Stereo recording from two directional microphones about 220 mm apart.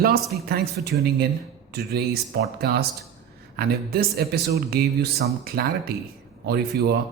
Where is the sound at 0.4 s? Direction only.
45° right (ahead or behind).